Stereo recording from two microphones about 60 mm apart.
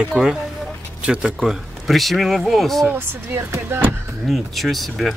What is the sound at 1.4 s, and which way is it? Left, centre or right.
Speech, centre.